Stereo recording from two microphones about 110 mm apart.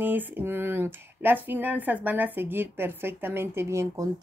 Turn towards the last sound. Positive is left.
turn(degrees=-25)  # may be behind; listen again after turning